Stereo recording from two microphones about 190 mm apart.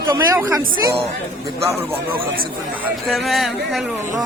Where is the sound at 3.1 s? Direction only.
Centre (ahead or behind).